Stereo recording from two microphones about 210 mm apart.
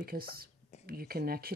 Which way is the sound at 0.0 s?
45° right (ahead or behind).